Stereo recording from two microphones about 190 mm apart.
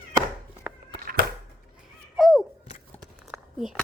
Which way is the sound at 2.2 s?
Centre (ahead or behind).